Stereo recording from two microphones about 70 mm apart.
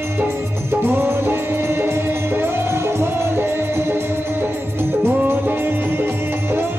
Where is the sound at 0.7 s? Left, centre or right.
Right.